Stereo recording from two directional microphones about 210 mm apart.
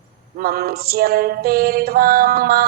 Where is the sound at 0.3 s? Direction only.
45° right (ahead or behind).